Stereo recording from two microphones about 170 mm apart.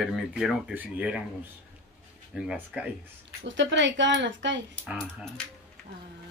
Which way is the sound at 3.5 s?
90° right.